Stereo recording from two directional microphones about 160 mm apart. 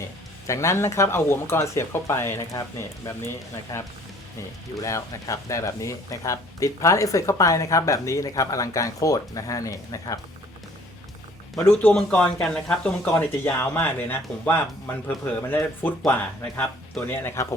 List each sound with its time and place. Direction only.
0.4 s speech: 20° left (ahead or behind)
3.7 s speech: 20° left (ahead or behind)
11.6 s speech: 10° left (ahead or behind)